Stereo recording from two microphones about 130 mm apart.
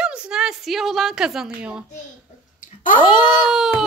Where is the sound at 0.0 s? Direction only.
5° right (ahead or behind).